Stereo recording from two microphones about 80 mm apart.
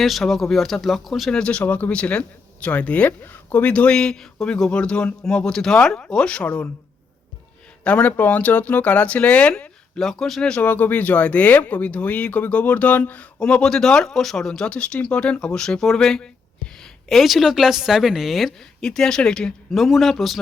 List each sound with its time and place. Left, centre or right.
0.0 s a woman's voice: centre
1.4 s speech: centre
7.9 s speech: centre
10.0 s a woman's voice: centre